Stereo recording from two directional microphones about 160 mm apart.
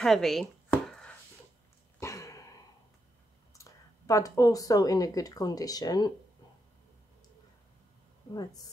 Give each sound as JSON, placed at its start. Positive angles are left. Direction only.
{"t": 0.0, "sound": "chopping", "side_deg": 0}
{"t": 2.0, "sound": "throat clearing", "side_deg": 20}
{"t": 3.5, "sound": "speech", "side_deg": 20}